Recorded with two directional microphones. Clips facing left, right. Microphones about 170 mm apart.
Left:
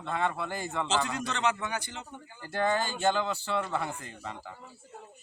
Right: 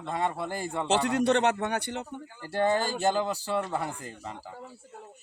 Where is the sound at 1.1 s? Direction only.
65° right (ahead or behind).